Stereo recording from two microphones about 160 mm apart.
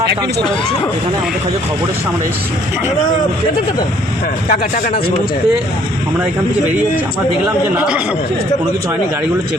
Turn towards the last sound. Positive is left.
turn(degrees=-5)  # may be behind; listen again after turning